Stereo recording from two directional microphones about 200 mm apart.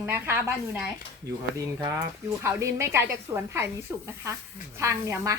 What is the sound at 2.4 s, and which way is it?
Speech, 15° right (ahead or behind).